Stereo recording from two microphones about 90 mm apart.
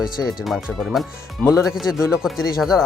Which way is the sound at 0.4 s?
Centre (ahead or behind).